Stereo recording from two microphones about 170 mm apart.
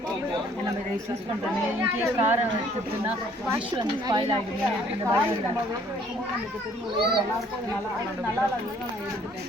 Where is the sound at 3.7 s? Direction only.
25° right (ahead or behind).